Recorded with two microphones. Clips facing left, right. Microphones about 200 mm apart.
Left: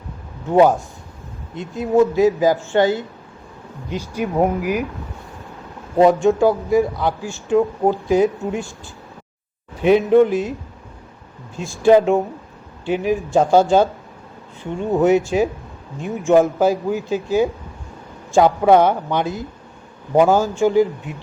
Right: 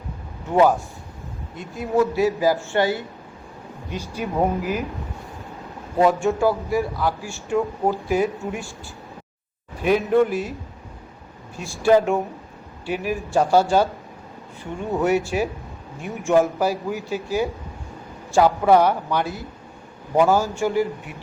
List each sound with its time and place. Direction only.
1.5 s a man's voice: 20° left (ahead or behind)
6.0 s a man's voice: 20° left (ahead or behind)
9.8 s a man's voice: 20° left (ahead or behind)
11.6 s a man's voice: 20° left (ahead or behind)
14.9 s a man's voice: 20° left (ahead or behind)